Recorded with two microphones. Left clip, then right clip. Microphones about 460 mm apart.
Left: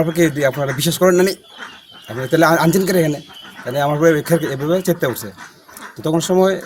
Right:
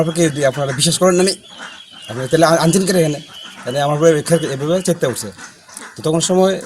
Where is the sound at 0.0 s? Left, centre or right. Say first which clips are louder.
Even; left.